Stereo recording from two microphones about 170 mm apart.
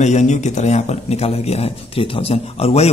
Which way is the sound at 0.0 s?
45° left (ahead or behind).